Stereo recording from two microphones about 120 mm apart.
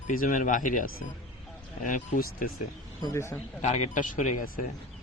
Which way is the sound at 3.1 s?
25° left (ahead or behind).